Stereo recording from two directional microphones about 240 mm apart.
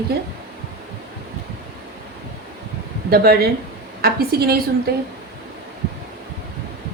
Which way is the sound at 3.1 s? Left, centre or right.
Right.